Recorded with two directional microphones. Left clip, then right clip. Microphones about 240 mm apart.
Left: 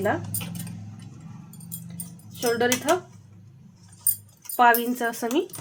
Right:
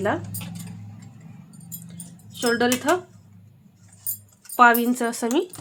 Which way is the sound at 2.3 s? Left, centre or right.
Right.